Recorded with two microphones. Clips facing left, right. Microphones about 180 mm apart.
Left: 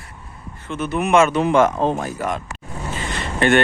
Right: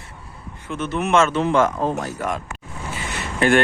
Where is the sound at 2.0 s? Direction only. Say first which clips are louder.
Left 1 dB; 5° left (ahead or behind).